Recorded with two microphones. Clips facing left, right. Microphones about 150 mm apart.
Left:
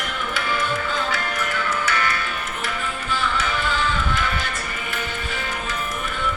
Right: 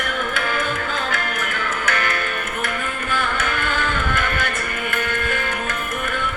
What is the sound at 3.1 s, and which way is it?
Music, 55° right (ahead or behind).